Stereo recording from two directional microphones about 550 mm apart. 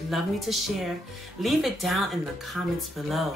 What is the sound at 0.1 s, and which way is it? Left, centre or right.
Speech, centre.